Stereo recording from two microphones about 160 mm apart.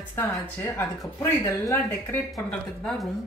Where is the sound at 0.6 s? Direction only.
10° left (ahead or behind).